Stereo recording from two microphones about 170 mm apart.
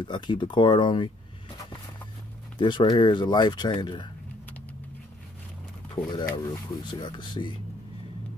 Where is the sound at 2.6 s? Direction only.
25° left (ahead or behind).